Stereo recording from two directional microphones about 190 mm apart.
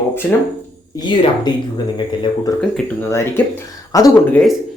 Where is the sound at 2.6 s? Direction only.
10° left (ahead or behind).